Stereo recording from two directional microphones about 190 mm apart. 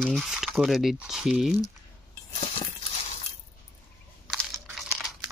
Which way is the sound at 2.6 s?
35° left (ahead or behind).